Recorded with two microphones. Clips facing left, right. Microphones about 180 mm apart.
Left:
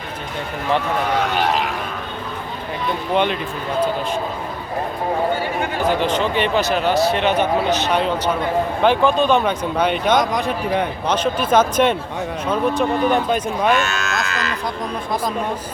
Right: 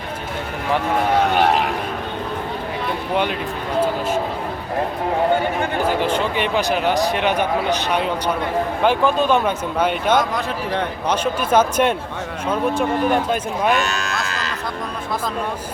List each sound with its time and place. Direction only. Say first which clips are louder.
5.8 s speech: left 2 dB; 10° right (ahead or behind)
10.3 s speech: left 3 dB; 10° left (ahead or behind)
11.1 s speech: left 1 dB; 10° right (ahead or behind)
13.7 s cattle: left 1 dB; 35° right (ahead or behind)